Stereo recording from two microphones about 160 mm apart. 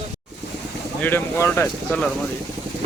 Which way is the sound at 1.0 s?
15° left (ahead or behind).